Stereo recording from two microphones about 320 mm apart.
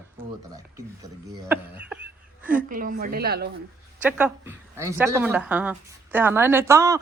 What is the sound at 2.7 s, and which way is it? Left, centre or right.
Speech, right.